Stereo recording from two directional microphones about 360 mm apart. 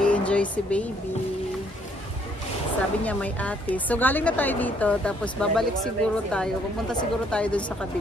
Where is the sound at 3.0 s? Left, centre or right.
Centre.